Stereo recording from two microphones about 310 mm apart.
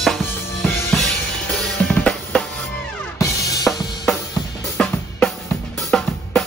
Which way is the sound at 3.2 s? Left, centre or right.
Centre.